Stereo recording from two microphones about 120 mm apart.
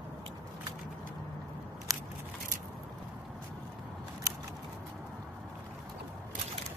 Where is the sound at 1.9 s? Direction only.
30° right (ahead or behind).